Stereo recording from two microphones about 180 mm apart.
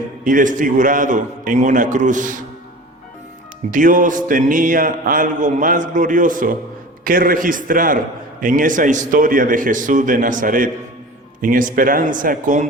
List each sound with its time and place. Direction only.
0.3 s a man's voice: 45° right (ahead or behind)
3.7 s a man's voice: 45° right (ahead or behind)